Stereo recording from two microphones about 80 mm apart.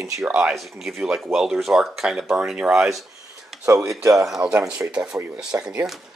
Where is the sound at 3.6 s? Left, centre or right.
Right.